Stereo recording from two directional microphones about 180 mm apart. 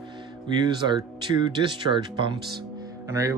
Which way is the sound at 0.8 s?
25° right (ahead or behind).